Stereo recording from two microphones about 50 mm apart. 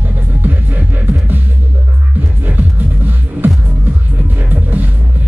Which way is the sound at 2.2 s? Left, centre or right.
Right.